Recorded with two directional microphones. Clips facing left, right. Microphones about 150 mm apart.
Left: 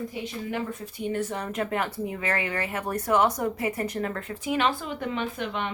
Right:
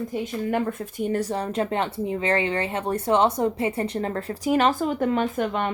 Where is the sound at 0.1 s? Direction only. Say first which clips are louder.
Right 6 dB; 55° right (ahead or behind).